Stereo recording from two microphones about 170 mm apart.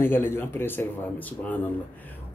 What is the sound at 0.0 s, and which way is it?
Speech, 15° left (ahead or behind).